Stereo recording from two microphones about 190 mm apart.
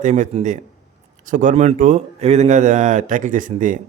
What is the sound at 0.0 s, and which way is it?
Speech, 40° right (ahead or behind).